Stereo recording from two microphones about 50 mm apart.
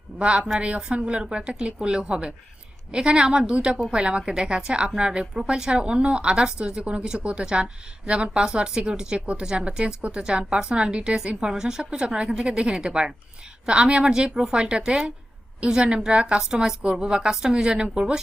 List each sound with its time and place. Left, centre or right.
0.2 s a woman's voice: right